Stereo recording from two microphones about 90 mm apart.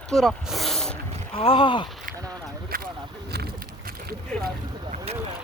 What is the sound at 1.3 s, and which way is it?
Speech, 85° left.